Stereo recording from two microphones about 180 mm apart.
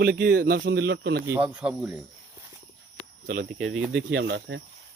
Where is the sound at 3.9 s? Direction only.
85° right.